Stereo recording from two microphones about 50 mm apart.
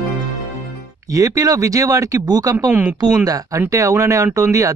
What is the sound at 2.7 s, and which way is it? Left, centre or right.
Speech, right.